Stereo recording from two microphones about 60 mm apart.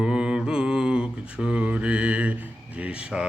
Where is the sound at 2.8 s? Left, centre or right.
Centre.